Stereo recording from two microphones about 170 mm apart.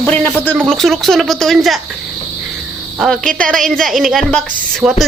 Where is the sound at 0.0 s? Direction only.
10° left (ahead or behind).